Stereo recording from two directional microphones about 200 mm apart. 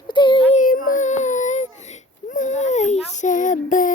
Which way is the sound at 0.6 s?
45° left (ahead or behind).